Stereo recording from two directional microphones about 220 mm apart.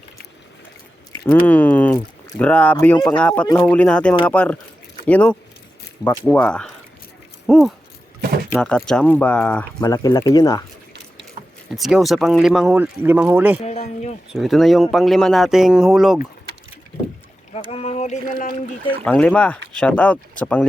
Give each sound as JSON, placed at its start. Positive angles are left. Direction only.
{"t": 1.3, "sound": "a sound", "side_deg": 5}
{"t": 2.4, "sound": "speech", "side_deg": 5}
{"t": 9.8, "sound": "speech", "side_deg": 15}
{"t": 11.7, "sound": "speech", "side_deg": 0}
{"t": 13.6, "sound": "speech", "side_deg": 30}
{"t": 14.3, "sound": "speech", "side_deg": 0}
{"t": 17.7, "sound": "a sound", "side_deg": 25}
{"t": 19.0, "sound": "speech", "side_deg": 5}